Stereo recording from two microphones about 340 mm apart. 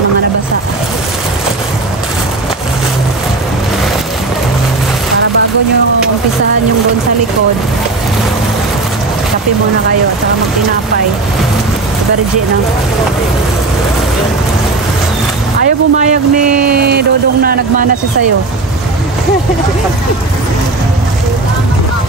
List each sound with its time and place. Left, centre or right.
15.6 s speech: right